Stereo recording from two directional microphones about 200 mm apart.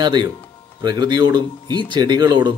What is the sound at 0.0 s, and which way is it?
Speech, 20° right (ahead or behind).